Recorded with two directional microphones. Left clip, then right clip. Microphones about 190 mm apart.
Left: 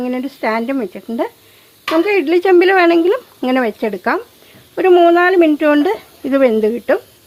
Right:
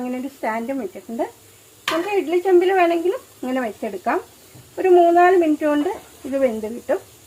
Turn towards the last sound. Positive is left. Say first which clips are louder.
# left 8 dB
turn(degrees=60)  # may be behind; listen again after turning